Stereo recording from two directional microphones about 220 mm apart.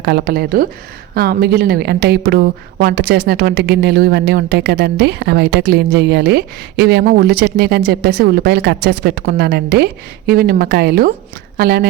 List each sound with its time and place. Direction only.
0.0 s speech: 50° right (ahead or behind)